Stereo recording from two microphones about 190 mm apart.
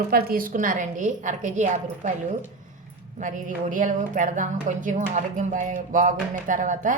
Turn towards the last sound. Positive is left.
turn(degrees=-45)  # may be behind; listen again after turning